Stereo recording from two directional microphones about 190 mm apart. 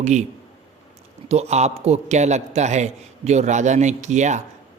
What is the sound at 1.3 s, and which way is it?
A man's voice, 35° right (ahead or behind).